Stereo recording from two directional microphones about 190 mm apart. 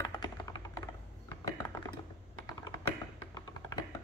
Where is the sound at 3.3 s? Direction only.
20° left (ahead or behind).